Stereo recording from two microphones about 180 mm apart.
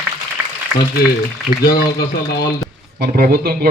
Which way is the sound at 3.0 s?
55° right (ahead or behind).